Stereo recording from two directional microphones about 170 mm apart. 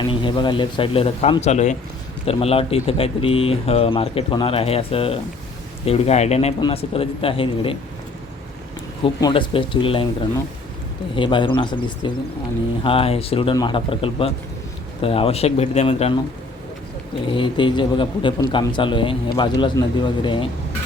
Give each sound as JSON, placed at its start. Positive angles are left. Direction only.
{"t": 0.0, "sound": "speech", "side_deg": 30}
{"t": 9.2, "sound": "speech", "side_deg": 30}
{"t": 11.1, "sound": "speech", "side_deg": 30}
{"t": 17.3, "sound": "speech", "side_deg": 30}